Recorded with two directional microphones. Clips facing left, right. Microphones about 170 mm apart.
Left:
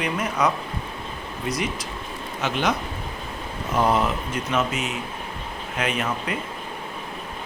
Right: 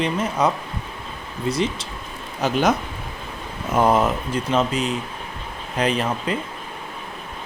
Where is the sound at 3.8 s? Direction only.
45° right (ahead or behind).